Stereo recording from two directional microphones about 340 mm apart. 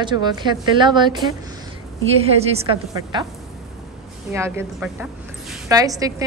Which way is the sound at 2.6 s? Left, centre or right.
Centre.